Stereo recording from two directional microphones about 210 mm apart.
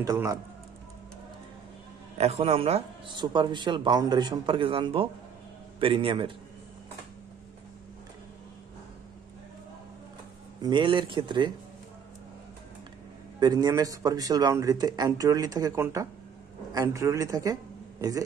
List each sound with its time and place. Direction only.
0.0 s a man's voice: 15° right (ahead or behind)
2.1 s a man's voice: 30° right (ahead or behind)
10.6 s a man's voice: 25° right (ahead or behind)
13.4 s a man's voice: 20° right (ahead or behind)